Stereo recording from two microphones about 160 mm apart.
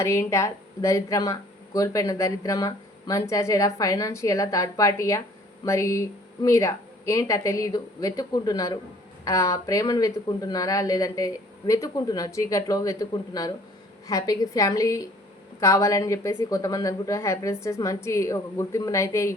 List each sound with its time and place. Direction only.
0.0 s speech: 15° left (ahead or behind)